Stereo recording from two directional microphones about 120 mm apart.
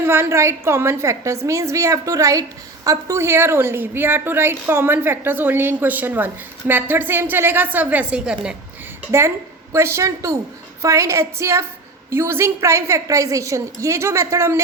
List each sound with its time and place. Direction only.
0.0 s a woman's voice: 20° right (ahead or behind)
9.7 s a woman's voice: 25° right (ahead or behind)